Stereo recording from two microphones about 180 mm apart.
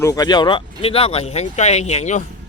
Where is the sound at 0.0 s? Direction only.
20° left (ahead or behind); by 2.2 s 40° left (ahead or behind).